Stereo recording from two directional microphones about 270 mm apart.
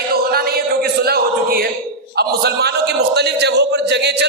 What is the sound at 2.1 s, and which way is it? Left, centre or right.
A man's voice, right.